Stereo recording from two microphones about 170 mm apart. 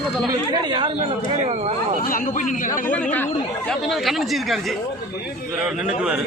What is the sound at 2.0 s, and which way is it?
Speech, 55° left (ahead or behind).